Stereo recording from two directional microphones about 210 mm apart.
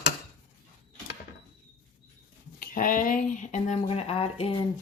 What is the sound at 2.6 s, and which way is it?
Speech, 40° left (ahead or behind).